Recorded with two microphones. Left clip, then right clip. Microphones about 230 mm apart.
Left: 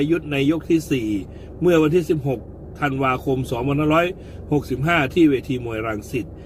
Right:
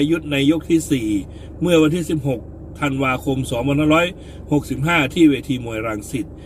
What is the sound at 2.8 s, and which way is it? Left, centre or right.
A man's voice, centre.